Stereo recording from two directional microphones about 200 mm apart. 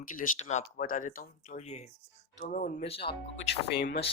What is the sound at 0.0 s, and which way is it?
Speech, 40° left (ahead or behind).